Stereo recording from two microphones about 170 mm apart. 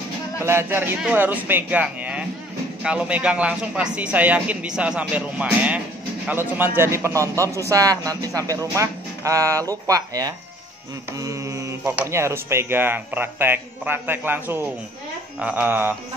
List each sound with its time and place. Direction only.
0.5 s speech: 15° right (ahead or behind)